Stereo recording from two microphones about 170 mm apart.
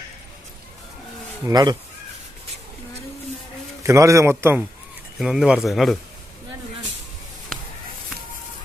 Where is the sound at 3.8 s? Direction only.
15° right (ahead or behind).